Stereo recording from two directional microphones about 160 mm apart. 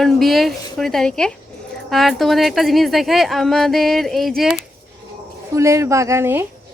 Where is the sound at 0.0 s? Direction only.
Centre (ahead or behind).